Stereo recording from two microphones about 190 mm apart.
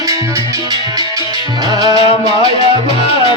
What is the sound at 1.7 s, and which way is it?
Music, 20° right (ahead or behind).